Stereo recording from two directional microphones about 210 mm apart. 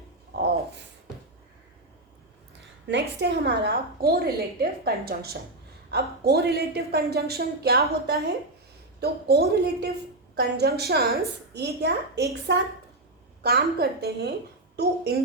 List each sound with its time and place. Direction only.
2.8 s a woman's voice: 55° right (ahead or behind)